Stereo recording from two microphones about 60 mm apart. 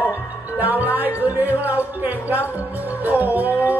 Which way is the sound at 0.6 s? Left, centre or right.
Right.